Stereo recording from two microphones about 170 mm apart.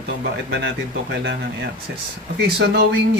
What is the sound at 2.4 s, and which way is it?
Speech, 75° right (ahead or behind).